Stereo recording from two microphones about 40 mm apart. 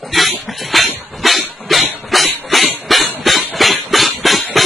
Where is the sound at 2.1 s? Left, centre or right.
Centre.